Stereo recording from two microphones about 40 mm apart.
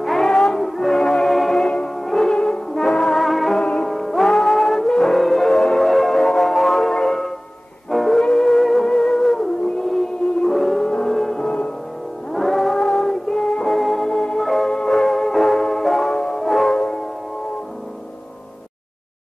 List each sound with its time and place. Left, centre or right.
0.0 s music: centre
2.3 s brass instrument: left
2.7 s music: centre
3.2 s music: centre
3.5 s music: centre
3.9 s music: centre
12.3 s music: centre
14.0 s music: centre
14.4 s music: centre
16.7 s music: centre